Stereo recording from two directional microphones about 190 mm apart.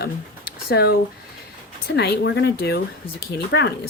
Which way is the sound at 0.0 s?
55° left (ahead or behind).